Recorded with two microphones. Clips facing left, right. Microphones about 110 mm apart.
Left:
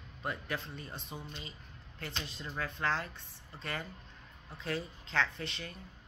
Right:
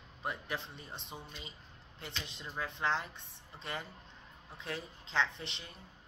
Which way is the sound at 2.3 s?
20° right (ahead or behind).